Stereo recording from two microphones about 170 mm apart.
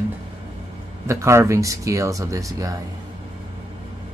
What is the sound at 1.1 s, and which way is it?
Speech, 15° right (ahead or behind).